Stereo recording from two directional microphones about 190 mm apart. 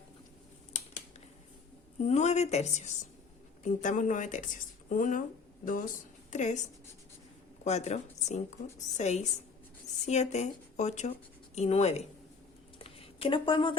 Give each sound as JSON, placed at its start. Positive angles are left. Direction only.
{"t": 2.0, "sound": "speech", "side_deg": 35}
{"t": 7.6, "sound": "speech", "side_deg": 35}
{"t": 12.8, "sound": "a sound", "side_deg": 30}